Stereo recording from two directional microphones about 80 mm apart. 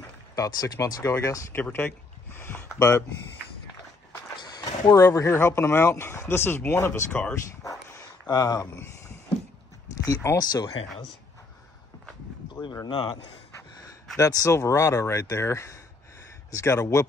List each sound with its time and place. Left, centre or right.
0.4 s speech: left
1.5 s speech: left
4.4 s a sound: left
4.9 s speech: left
7.6 s dog: left
8.3 s speech: left
10.3 s speech: left
12.8 s speech: left
14.1 s speech: left